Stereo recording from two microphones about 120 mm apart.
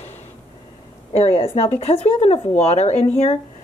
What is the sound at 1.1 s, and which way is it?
Speech, 55° left (ahead or behind).